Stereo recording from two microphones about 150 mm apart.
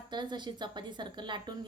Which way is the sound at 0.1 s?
30° right (ahead or behind).